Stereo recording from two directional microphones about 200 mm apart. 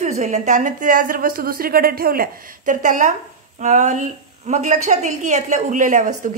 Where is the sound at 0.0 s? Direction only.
35° right (ahead or behind).